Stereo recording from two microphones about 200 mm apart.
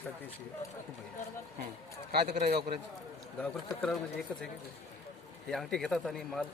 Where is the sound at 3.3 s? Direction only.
5° left (ahead or behind).